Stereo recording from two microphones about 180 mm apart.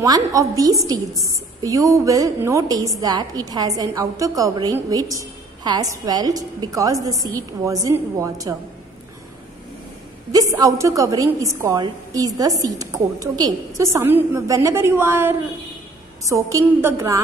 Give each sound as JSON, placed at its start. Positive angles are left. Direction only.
{"t": 0.0, "sound": "a woman's voice", "side_deg": -20}
{"t": 10.3, "sound": "a woman's voice", "side_deg": -20}